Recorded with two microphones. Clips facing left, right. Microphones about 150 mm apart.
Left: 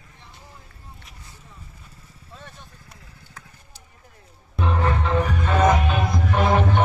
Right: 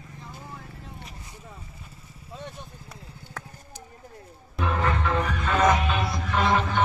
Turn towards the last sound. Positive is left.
turn(degrees=55)  # may be behind; listen again after turning